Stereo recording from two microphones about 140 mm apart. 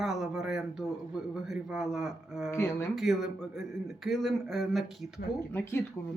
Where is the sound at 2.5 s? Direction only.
20° left (ahead or behind).